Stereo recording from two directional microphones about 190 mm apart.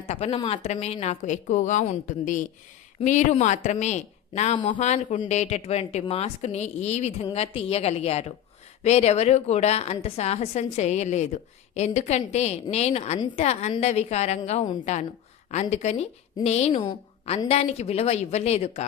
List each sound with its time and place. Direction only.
0.1 s a woman's voice: 30° left (ahead or behind)